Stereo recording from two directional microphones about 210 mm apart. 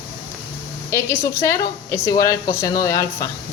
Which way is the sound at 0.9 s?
10° left (ahead or behind).